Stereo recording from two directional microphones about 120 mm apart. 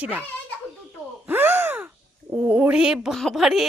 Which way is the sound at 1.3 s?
15° right (ahead or behind).